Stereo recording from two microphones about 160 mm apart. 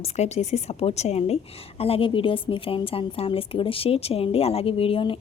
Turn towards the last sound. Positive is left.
turn(degrees=35)  # may be behind; listen again after turning